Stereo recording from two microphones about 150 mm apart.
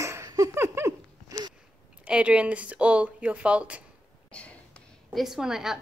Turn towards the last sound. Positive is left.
turn(degrees=-5)  # may be behind; listen again after turning